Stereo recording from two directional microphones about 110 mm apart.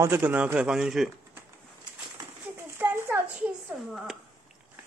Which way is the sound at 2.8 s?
20° right (ahead or behind).